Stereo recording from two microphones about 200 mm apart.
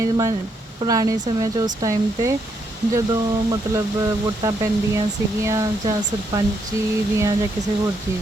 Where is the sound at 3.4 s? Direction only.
15° right (ahead or behind).